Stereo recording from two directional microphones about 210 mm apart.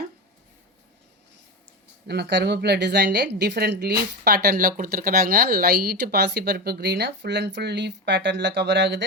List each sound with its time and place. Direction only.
2.0 s a woman's voice: 50° right (ahead or behind)